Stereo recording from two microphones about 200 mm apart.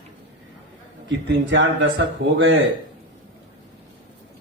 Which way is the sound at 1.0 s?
65° right (ahead or behind).